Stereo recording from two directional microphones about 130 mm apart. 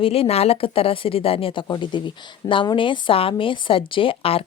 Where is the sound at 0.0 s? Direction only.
45° left (ahead or behind).